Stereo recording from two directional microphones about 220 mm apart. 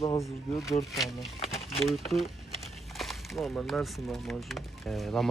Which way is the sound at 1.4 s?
25° left (ahead or behind).